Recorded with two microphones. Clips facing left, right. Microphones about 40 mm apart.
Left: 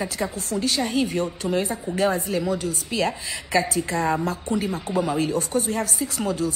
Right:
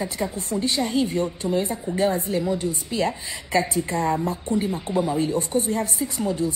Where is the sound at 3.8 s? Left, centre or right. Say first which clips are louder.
Even; left.